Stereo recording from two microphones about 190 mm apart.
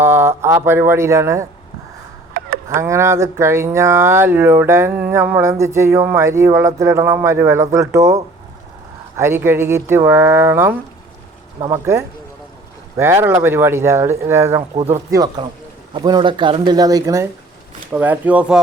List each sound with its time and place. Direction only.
0.0 s speech: 15° right (ahead or behind)
2.6 s speech: 15° right (ahead or behind)